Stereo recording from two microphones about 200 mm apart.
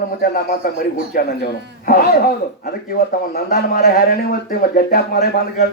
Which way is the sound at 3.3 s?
50° left (ahead or behind).